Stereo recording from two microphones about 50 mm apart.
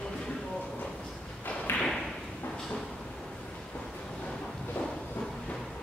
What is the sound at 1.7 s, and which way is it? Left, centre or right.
Tap, left.